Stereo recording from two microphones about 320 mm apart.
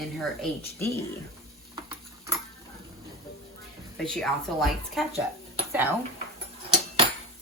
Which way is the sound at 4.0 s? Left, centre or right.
Centre.